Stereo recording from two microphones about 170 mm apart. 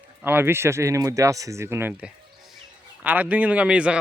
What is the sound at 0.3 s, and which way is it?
Speech, 15° right (ahead or behind).